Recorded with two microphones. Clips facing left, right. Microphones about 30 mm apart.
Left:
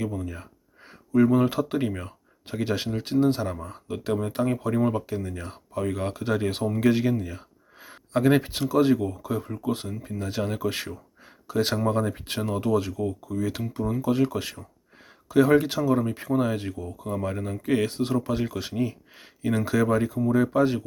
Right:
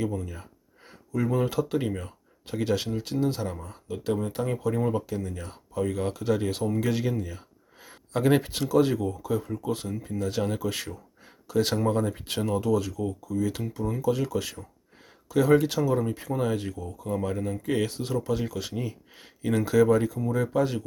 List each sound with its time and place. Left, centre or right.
0.2 s speech: centre
12.5 s speech: left
16.7 s speech: left
17.1 s speech: centre